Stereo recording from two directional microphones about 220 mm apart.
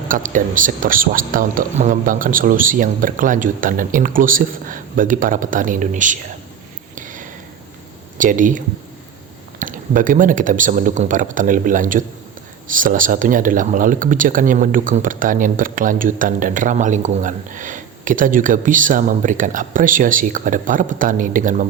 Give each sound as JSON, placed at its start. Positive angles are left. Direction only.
{"t": 0.1, "sound": "speech", "side_deg": -35}
{"t": 6.9, "sound": "a sound", "side_deg": -35}
{"t": 8.2, "sound": "speech", "side_deg": -35}